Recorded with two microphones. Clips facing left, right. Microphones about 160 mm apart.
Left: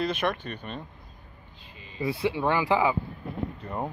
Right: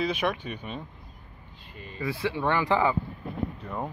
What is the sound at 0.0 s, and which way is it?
Speech, 5° right (ahead or behind).